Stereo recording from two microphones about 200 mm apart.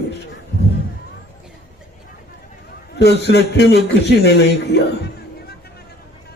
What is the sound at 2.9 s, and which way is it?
A man's voice, 55° left (ahead or behind).